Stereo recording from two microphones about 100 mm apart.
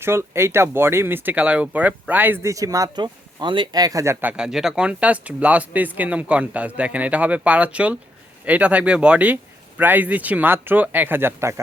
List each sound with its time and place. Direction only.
0.0 s speech: 25° right (ahead or behind)
4.2 s speech: 10° right (ahead or behind); by 11.6 s 25° right (ahead or behind)